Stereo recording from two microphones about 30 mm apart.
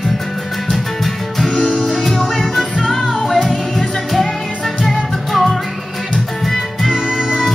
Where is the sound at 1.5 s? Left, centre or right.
Left.